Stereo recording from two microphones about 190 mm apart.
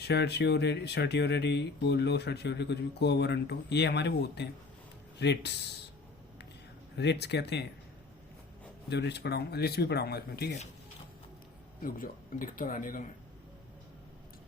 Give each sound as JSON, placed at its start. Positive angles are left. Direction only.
{"t": 0.0, "sound": "speech", "side_deg": 60}
{"t": 6.9, "sound": "speech", "side_deg": 65}
{"t": 8.9, "sound": "speech", "side_deg": 60}
{"t": 11.8, "sound": "speech", "side_deg": 45}